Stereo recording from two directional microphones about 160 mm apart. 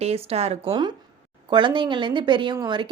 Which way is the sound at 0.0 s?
40° right (ahead or behind).